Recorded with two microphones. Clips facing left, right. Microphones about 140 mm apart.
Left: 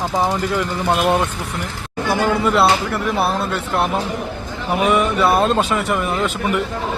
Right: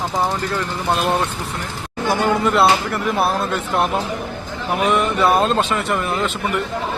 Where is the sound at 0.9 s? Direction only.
Centre (ahead or behind).